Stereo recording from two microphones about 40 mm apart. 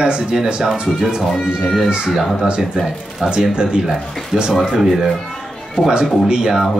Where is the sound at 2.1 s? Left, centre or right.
Centre.